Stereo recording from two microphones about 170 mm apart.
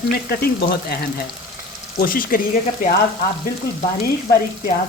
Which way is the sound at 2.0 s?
55° left (ahead or behind).